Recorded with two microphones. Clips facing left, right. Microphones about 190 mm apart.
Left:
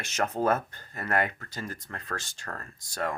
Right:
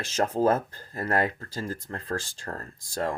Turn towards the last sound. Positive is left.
turn(degrees=-30)  # may be behind; listen again after turning